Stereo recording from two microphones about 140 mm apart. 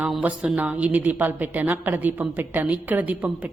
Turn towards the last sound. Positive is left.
turn(degrees=-10)  # may be behind; listen again after turning